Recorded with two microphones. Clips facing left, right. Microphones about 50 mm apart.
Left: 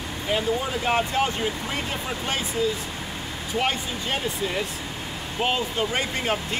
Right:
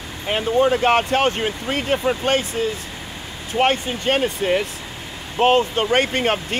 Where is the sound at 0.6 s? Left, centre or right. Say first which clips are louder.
Right 8 dB; right.